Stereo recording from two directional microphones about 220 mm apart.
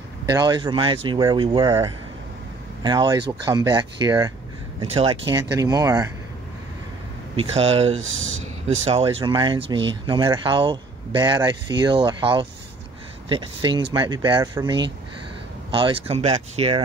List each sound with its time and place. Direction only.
0.3 s speech: 20° right (ahead or behind)
7.3 s speech: 25° right (ahead or behind)
7.9 s speech: 65° right (ahead or behind)
8.4 s speech: 30° right (ahead or behind)